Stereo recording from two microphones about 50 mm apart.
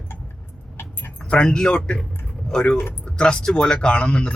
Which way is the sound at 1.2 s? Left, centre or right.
Centre.